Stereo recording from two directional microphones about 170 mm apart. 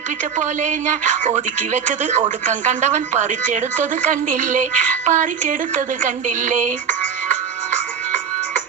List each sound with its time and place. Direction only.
0.3 s a woman's voice: 45° right (ahead or behind)